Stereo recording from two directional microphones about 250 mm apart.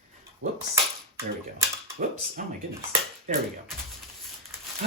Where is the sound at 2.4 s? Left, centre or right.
Right.